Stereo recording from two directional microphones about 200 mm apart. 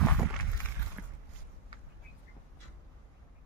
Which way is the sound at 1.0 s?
10° right (ahead or behind).